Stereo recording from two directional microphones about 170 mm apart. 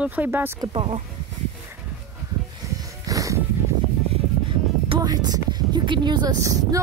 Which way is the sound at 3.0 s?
20° right (ahead or behind).